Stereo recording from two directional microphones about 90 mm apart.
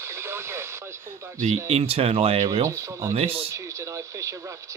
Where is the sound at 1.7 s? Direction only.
90° right.